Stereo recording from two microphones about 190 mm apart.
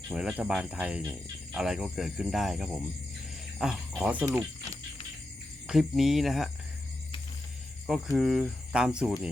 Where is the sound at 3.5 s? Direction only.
Centre (ahead or behind).